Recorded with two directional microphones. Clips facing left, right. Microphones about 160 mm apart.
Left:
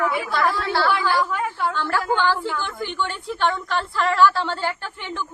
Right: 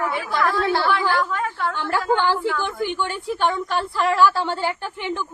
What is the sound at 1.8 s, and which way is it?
A woman's voice, 15° right (ahead or behind).